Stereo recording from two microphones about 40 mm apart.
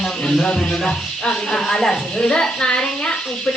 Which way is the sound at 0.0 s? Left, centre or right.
Centre.